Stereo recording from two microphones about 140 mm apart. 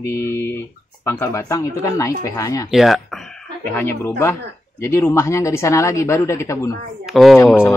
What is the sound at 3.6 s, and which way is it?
Speech, 15° left (ahead or behind).